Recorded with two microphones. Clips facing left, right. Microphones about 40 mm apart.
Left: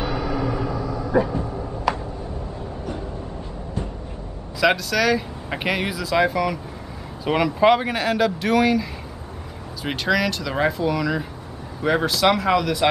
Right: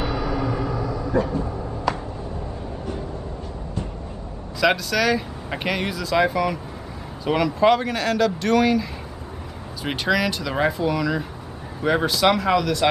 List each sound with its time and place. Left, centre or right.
1.1 s speech: centre
1.9 s a sound: centre
4.6 s speech: centre
7.2 s speech: centre
9.8 s speech: centre